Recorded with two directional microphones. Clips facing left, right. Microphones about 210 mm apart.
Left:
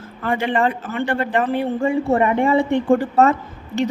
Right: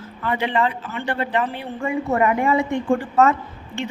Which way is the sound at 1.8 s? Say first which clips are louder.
Left 1 dB; 30° left (ahead or behind).